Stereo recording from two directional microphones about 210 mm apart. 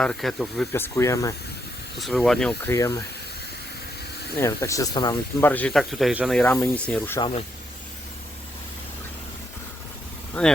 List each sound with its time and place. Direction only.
0.0 s speech: centre (ahead or behind)
0.7 s speech: 10° left (ahead or behind)
2.0 s speech: centre (ahead or behind)
4.4 s speech: 15° left (ahead or behind)
5.5 s speech: 5° left (ahead or behind)
6.4 s speech: 10° left (ahead or behind)
7.2 s speech: 25° left (ahead or behind)
10.4 s speech: 5° left (ahead or behind)